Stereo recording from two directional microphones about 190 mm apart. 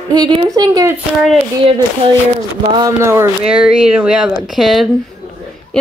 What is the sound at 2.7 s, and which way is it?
Speech, 20° right (ahead or behind).